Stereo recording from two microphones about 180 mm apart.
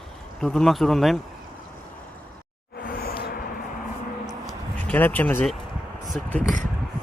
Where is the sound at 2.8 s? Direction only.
60° left (ahead or behind).